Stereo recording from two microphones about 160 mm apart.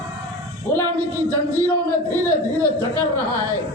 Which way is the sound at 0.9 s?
20° right (ahead or behind).